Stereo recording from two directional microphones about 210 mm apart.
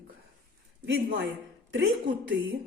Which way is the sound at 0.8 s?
65° right (ahead or behind).